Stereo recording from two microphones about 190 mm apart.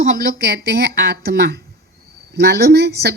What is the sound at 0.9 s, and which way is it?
Speech, 55° right (ahead or behind).